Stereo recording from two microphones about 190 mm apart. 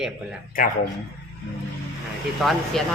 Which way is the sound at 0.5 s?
50° left (ahead or behind).